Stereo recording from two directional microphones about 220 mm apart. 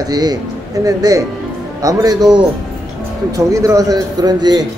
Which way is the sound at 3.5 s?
15° right (ahead or behind).